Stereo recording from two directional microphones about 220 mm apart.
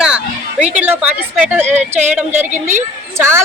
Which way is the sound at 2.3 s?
30° right (ahead or behind).